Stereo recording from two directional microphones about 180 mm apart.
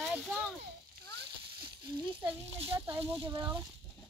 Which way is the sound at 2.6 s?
30° right (ahead or behind).